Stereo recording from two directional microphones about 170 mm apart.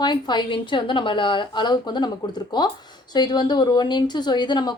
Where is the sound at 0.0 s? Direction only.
25° left (ahead or behind).